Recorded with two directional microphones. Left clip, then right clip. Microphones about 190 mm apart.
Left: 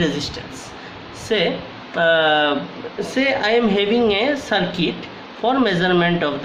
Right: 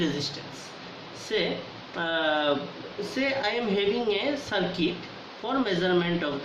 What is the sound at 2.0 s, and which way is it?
A woman's voice, 55° left (ahead or behind).